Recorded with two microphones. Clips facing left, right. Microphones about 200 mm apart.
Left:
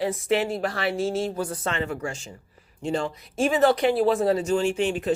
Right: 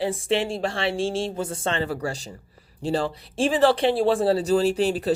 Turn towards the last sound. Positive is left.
turn(degrees=-35)  # may be behind; listen again after turning